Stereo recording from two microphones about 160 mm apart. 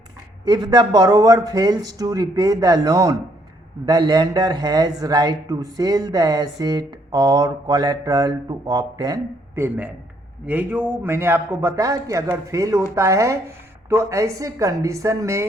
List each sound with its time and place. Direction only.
0.4 s a man's voice: 25° right (ahead or behind)